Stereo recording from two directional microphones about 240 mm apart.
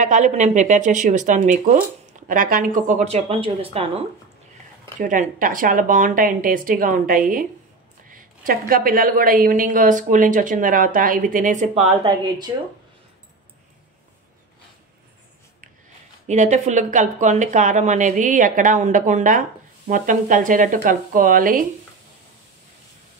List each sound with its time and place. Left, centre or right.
0.0 s a woman's voice: right
5.0 s a woman's voice: right
16.3 s a woman's voice: right